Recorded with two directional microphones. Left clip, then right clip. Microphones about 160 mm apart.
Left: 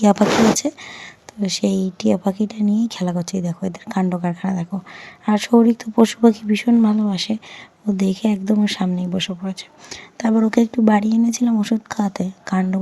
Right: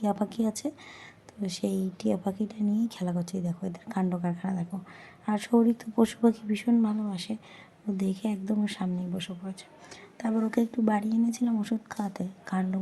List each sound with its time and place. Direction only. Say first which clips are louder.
0.0 s speech: left 15 dB; 35° left (ahead or behind)